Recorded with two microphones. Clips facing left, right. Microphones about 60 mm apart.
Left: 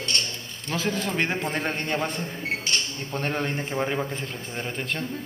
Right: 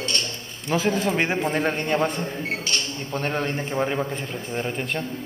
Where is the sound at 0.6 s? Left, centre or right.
Centre.